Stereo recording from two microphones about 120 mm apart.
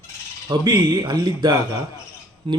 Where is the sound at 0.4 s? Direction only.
35° right (ahead or behind).